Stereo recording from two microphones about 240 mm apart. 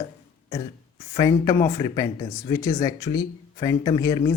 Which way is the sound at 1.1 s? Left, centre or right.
Centre.